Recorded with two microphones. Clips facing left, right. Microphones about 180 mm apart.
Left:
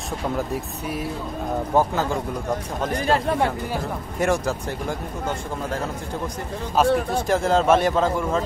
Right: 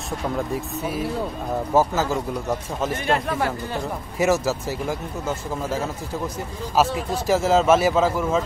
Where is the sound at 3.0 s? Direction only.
35° left (ahead or behind).